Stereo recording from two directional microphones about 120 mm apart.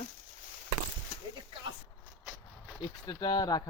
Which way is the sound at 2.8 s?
35° left (ahead or behind).